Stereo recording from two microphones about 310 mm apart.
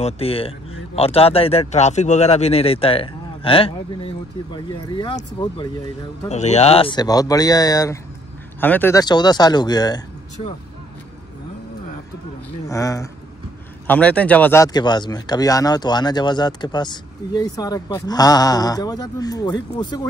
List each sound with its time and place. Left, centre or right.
0.0 s speech: centre
12.6 s speech: centre